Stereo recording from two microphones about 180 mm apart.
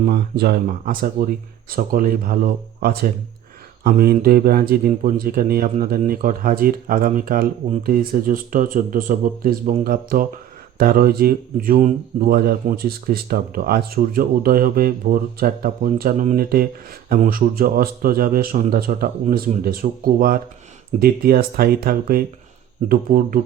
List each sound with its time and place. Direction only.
0.1 s speech: 60° right (ahead or behind)